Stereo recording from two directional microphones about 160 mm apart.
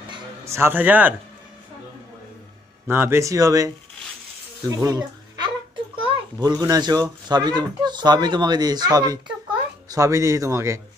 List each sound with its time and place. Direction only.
0.5 s a man's voice: 15° right (ahead or behind)
2.9 s a child's voice: 15° right (ahead or behind)